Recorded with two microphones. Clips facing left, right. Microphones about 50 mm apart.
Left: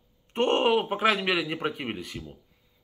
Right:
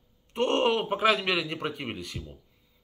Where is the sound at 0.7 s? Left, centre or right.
Centre.